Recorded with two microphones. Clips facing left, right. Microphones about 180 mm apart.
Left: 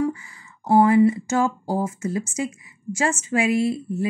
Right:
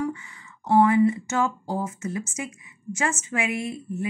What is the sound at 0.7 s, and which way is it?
A woman's voice, 30° left (ahead or behind).